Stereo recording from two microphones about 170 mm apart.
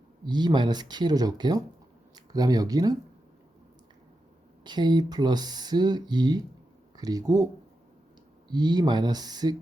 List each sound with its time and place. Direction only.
0.3 s speech: 25° right (ahead or behind)
4.6 s speech: 25° right (ahead or behind)
8.4 s speech: 25° right (ahead or behind)